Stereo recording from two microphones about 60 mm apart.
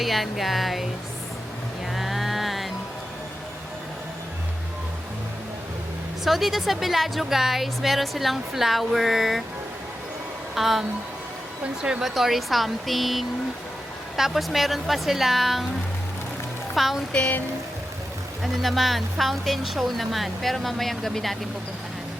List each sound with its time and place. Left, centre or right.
0.0 s a woman's voice: centre
1.9 s music: centre
6.2 s a woman's voice: centre
10.5 s a woman's voice: centre
11.6 s speech: centre
12.0 s a woman's voice: centre
16.7 s a woman's voice: centre
17.1 s music: left
18.4 s a woman's voice: centre